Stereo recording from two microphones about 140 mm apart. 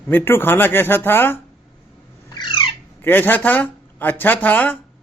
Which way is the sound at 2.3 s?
35° left (ahead or behind).